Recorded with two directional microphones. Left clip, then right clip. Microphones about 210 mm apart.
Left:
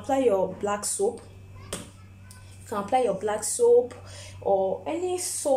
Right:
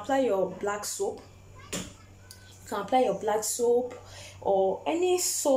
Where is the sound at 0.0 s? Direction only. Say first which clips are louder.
Left 3 dB; 5° left (ahead or behind).